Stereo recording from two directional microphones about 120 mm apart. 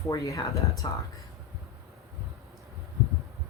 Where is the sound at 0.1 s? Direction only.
25° left (ahead or behind).